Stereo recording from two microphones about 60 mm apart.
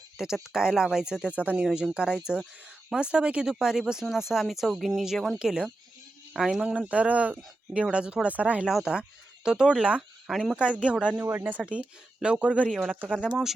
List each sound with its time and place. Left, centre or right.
0.4 s speech: centre
1.3 s speech: right; by 5.4 s centre
5.4 s speech: centre
6.7 s speech: right
8.6 s speech: centre
10.2 s speech: centre
11.2 s speech: right
11.6 s speech: centre
12.6 s speech: centre
12.9 s speech: right